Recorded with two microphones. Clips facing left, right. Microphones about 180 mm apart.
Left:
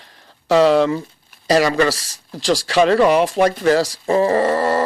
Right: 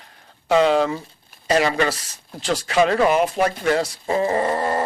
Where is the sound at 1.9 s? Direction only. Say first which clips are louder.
Left 4 dB; 90° left.